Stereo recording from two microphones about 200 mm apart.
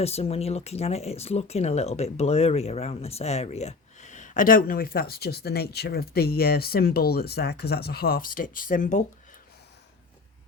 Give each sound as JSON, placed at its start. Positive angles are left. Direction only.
{"t": 0.0, "sound": "speech", "side_deg": 30}